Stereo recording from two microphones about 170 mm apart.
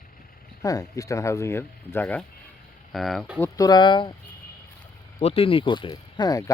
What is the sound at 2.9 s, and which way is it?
Speech, centre (ahead or behind).